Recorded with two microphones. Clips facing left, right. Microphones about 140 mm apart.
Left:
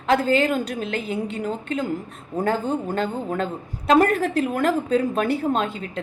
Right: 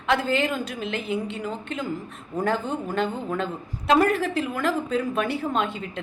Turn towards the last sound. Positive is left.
turn(degrees=40)  # may be behind; listen again after turning